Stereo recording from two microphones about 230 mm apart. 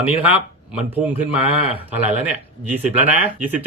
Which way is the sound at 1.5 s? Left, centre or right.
Left.